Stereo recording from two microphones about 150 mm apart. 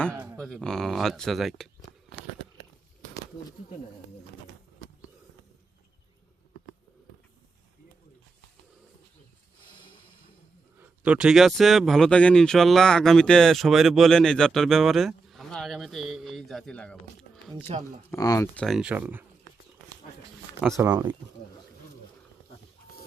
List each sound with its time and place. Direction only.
0.1 s a sound: 20° right (ahead or behind)
0.3 s speech: 5° left (ahead or behind)
10.8 s speech: 10° right (ahead or behind)
17.7 s speech: 40° right (ahead or behind)
18.1 s speech: 20° left (ahead or behind)
18.5 s speech: centre (ahead or behind)
20.7 s speech: 20° right (ahead or behind)